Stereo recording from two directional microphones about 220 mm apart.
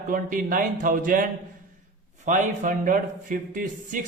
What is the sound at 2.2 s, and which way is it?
A man's voice, 35° right (ahead or behind).